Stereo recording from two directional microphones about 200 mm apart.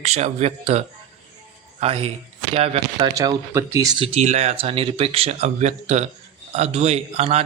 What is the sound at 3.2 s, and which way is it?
A man's voice, 15° right (ahead or behind).